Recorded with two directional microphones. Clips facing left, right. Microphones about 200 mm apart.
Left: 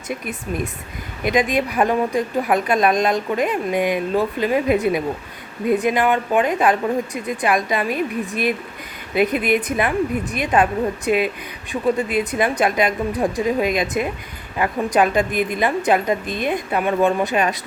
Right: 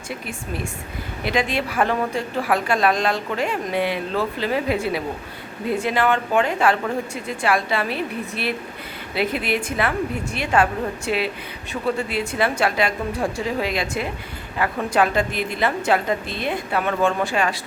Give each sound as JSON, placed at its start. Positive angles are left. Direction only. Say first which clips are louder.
{"t": 0.1, "sound": "a woman's voice", "louder": "left 4 dB", "side_deg": 20}